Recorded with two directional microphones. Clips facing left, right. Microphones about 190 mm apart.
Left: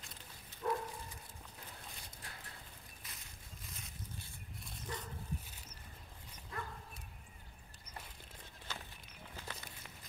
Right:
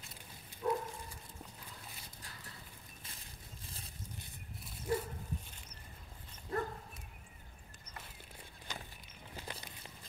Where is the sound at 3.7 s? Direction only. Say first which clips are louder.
Even; 30° right (ahead or behind).